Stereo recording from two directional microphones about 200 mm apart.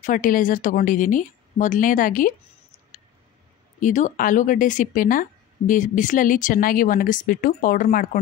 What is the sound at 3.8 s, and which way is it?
A woman's voice, 40° left (ahead or behind).